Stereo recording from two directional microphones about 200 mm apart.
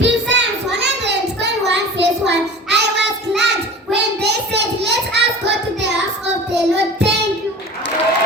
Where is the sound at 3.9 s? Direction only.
55° right (ahead or behind).